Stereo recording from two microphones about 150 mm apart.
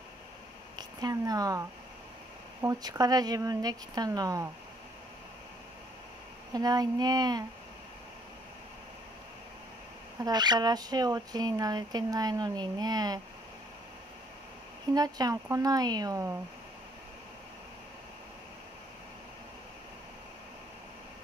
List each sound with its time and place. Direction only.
0.7 s speech: 25° right (ahead or behind)
6.5 s speech: 25° right (ahead or behind)
10.2 s speech: 30° right (ahead or behind)
15.0 s speech: 25° right (ahead or behind)